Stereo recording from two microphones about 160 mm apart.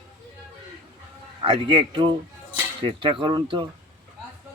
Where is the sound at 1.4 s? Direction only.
30° right (ahead or behind).